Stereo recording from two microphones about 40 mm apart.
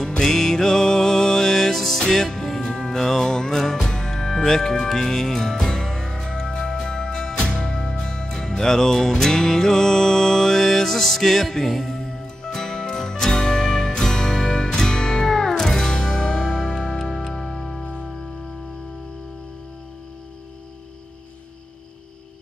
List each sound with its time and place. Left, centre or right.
0.2 s music: centre